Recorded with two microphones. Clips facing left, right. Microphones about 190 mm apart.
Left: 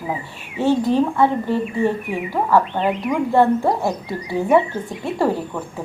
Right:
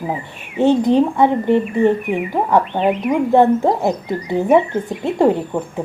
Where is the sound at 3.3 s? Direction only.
20° right (ahead or behind).